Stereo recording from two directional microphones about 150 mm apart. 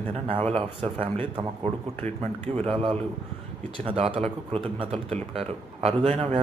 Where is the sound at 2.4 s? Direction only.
40° right (ahead or behind).